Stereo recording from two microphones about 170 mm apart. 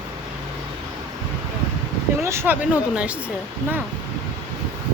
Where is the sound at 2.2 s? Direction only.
15° right (ahead or behind).